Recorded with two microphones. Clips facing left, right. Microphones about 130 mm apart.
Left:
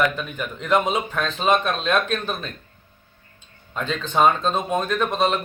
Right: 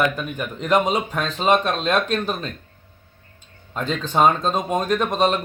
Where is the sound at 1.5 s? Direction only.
40° right (ahead or behind).